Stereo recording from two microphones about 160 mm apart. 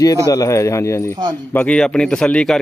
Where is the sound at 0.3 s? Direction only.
20° left (ahead or behind).